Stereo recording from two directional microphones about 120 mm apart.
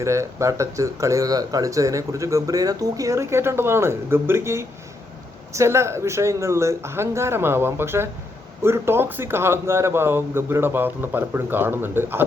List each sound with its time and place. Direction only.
0.0 s speech: 25° right (ahead or behind)